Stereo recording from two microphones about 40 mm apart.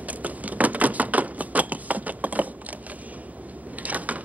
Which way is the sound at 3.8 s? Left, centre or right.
Right.